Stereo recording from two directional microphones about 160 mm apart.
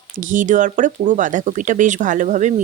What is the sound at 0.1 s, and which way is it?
Speech, 55° right (ahead or behind).